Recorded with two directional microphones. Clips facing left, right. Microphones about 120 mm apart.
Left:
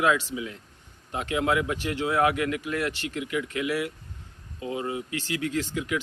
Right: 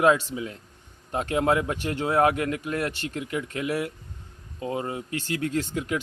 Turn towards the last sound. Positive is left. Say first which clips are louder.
# right 1 dB
turn(degrees=-40)  # may be behind; listen again after turning